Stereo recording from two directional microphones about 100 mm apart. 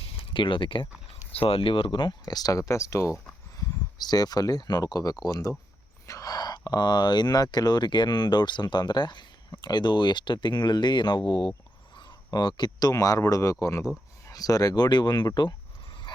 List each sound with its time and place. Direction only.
0.0 s a sound: 60° left (ahead or behind)
1.4 s speech: 75° left (ahead or behind); by 3.2 s 30° left (ahead or behind)
3.6 s speech: 40° left (ahead or behind)